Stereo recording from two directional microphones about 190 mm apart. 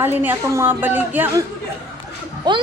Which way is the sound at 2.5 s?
20° right (ahead or behind).